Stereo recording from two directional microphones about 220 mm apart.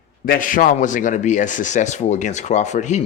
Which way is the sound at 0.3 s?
40° left (ahead or behind).